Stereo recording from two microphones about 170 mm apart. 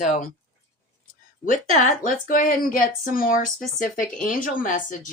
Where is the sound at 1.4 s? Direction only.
50° left (ahead or behind).